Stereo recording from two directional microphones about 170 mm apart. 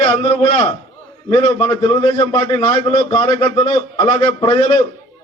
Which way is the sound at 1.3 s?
10° left (ahead or behind).